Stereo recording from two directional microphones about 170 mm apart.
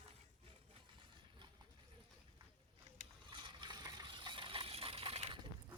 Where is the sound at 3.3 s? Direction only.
25° right (ahead or behind).